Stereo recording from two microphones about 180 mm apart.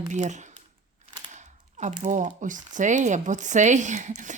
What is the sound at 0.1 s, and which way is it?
Speech, 40° right (ahead or behind).